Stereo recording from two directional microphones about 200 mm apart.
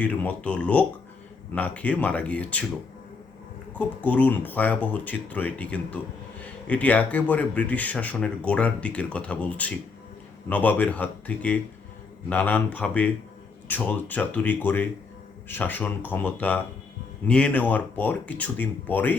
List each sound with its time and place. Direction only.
0.0 s speech: 5° left (ahead or behind)
3.8 s speech: 5° left (ahead or behind)